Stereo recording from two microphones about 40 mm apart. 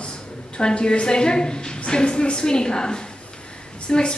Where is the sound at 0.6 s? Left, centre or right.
Left.